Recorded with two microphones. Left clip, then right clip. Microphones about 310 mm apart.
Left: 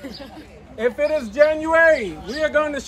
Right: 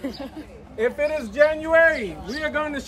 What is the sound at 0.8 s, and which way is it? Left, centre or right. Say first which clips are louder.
A man's voice: left 3 dB; centre.